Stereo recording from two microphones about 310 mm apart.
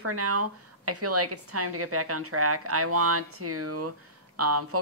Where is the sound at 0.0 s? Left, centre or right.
Right.